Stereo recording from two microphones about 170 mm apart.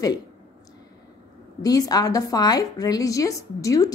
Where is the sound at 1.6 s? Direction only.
20° left (ahead or behind).